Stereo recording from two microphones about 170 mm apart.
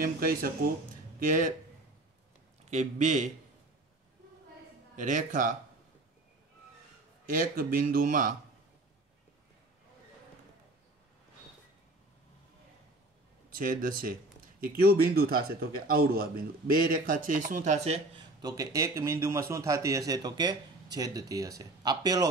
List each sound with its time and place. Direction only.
0.0 s speech: 55° right (ahead or behind)
2.7 s speech: 45° right (ahead or behind)
4.9 s speech: 50° right (ahead or behind)
7.2 s speech: 55° right (ahead or behind)
13.5 s speech: 55° right (ahead or behind); by 18.2 s 40° right (ahead or behind)
18.4 s a man's voice: 20° right (ahead or behind)